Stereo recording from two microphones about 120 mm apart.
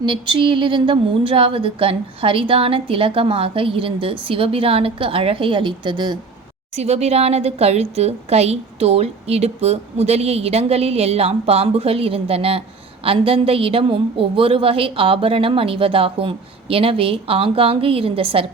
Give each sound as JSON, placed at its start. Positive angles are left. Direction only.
{"t": 0.0, "sound": "speech", "side_deg": -45}
{"t": 6.7, "sound": "a woman's voice", "side_deg": -65}